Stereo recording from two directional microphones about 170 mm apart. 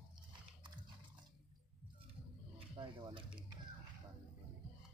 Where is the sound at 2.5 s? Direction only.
30° right (ahead or behind).